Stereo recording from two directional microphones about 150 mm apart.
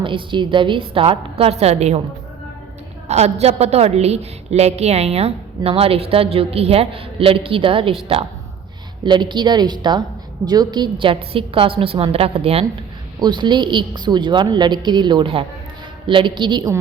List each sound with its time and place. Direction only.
0.0 s a woman's voice: 35° right (ahead or behind)
3.1 s a woman's voice: 45° right (ahead or behind)
9.0 s a woman's voice: 30° right (ahead or behind)
13.1 s a woman's voice: 30° right (ahead or behind)